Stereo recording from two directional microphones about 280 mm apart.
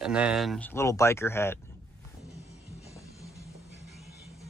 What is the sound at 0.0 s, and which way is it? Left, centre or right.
Speech, centre.